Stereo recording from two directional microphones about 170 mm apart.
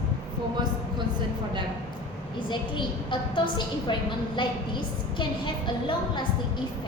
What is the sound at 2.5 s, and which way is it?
A woman's voice, 30° left (ahead or behind).